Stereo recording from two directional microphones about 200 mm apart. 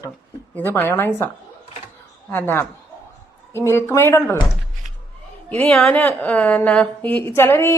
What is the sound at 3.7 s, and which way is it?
Speech, 10° left (ahead or behind).